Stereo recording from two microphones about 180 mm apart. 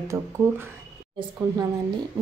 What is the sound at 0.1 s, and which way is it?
Speech, 15° right (ahead or behind).